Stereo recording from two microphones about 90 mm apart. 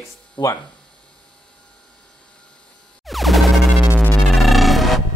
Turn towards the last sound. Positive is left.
turn(degrees=0)  # may be behind; listen again after turning